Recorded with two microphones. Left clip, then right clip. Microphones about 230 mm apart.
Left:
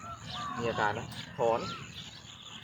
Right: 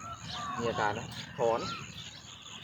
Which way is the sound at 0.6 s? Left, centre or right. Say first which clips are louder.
Left 1 dB; centre.